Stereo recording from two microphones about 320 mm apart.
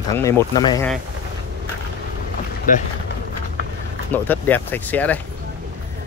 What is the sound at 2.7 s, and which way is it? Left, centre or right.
Speech, left.